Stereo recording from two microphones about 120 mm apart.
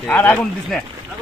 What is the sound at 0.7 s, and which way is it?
Speech, centre (ahead or behind).